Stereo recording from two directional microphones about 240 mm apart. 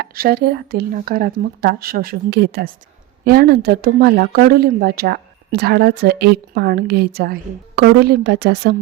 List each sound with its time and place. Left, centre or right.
0.0 s a woman's voice: right